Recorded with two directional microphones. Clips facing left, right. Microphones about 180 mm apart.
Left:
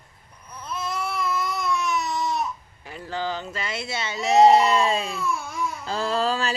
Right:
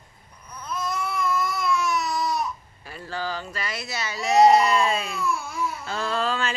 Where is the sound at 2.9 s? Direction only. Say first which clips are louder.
Left 2 dB; 15° left (ahead or behind).